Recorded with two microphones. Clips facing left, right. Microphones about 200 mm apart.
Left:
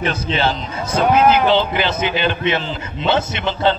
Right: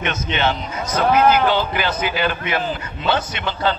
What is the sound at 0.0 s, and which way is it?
A man's voice, 30° left (ahead or behind).